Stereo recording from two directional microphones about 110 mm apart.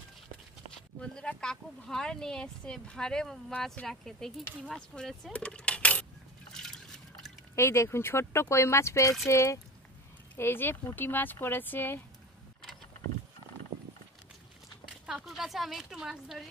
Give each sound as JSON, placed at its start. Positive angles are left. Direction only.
{"t": 1.0, "sound": "speech", "side_deg": 10}
{"t": 6.5, "sound": "liquid", "side_deg": 5}
{"t": 7.5, "sound": "speech", "side_deg": 25}
{"t": 14.9, "sound": "speech", "side_deg": -5}